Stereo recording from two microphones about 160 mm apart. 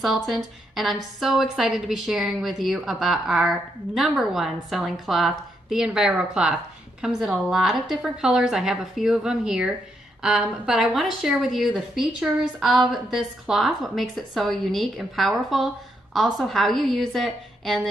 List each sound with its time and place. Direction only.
0.0 s a woman's voice: centre (ahead or behind)